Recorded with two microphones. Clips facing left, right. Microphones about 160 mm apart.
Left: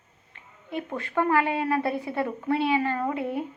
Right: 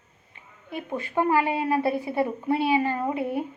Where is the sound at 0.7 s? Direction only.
5° right (ahead or behind).